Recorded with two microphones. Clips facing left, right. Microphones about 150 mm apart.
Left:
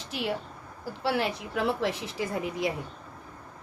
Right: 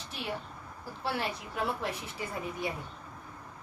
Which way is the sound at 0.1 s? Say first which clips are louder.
Left 7 dB; 90° left.